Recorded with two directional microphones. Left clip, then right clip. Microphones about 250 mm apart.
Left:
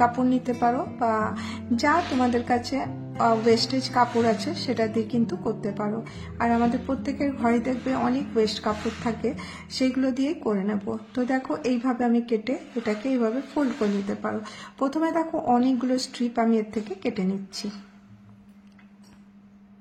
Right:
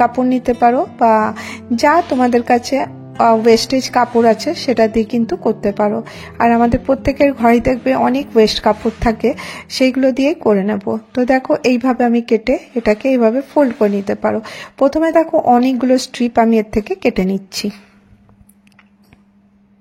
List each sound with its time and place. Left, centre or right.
0.0 s a woman's voice: right